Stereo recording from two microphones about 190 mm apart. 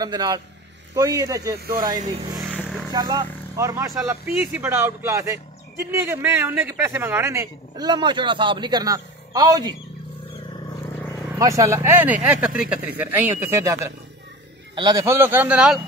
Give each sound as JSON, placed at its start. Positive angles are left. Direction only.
{"t": 0.0, "sound": "a man's voice", "side_deg": -20}
{"t": 2.4, "sound": "a sound", "side_deg": -5}
{"t": 2.9, "sound": "a man's voice", "side_deg": -20}
{"t": 11.2, "sound": "speech", "side_deg": -15}